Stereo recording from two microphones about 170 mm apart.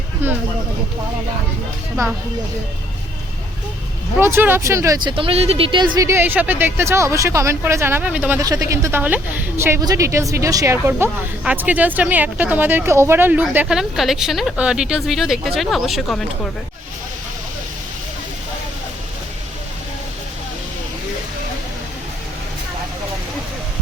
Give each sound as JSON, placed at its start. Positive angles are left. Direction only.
{"t": 0.2, "sound": "a sound", "side_deg": -10}
{"t": 4.2, "sound": "a woman's voice", "side_deg": -15}
{"t": 5.0, "sound": "a woman's voice", "side_deg": -30}
{"t": 8.4, "sound": "a woman's voice", "side_deg": -20}